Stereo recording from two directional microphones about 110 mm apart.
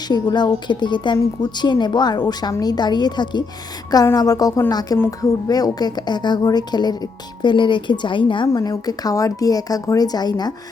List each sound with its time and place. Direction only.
0.1 s a woman's voice: 40° left (ahead or behind)